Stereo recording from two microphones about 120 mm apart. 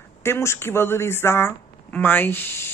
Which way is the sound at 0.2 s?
20° left (ahead or behind).